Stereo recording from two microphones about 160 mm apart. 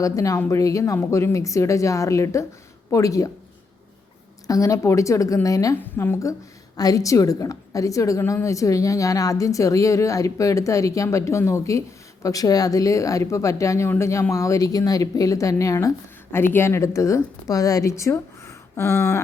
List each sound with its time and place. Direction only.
0.0 s a woman's voice: 20° left (ahead or behind)
4.4 s a woman's voice: 20° left (ahead or behind)